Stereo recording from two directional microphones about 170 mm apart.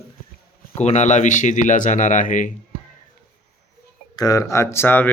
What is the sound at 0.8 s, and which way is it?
Speech, 40° left (ahead or behind).